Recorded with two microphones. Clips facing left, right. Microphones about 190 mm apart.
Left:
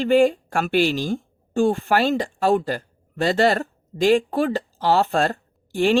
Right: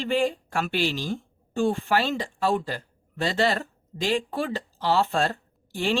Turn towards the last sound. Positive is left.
turn(degrees=50)  # may be behind; listen again after turning